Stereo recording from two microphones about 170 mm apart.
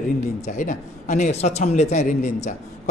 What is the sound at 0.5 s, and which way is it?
A man's voice, 50° left (ahead or behind).